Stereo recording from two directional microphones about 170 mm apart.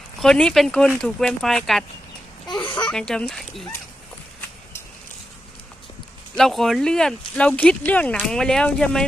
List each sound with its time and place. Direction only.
0.2 s speech: 5° left (ahead or behind)
2.6 s speech: 25° left (ahead or behind)
2.9 s speech: 5° left (ahead or behind)
6.3 s speech: centre (ahead or behind)